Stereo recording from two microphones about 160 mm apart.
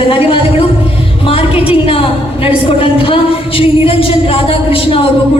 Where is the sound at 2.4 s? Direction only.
35° left (ahead or behind).